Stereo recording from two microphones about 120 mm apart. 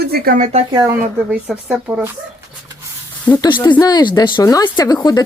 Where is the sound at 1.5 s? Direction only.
Centre (ahead or behind).